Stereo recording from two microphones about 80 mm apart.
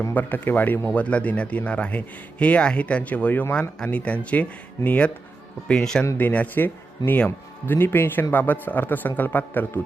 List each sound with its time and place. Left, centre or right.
0.1 s speech: left
6.1 s speech: centre